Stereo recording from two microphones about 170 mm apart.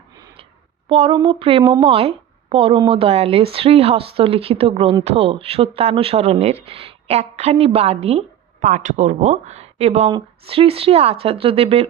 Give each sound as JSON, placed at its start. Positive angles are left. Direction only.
{"t": 0.9, "sound": "speech", "side_deg": -35}
{"t": 8.6, "sound": "speech", "side_deg": -50}